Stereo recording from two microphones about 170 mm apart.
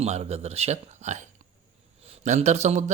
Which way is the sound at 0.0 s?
40° right (ahead or behind).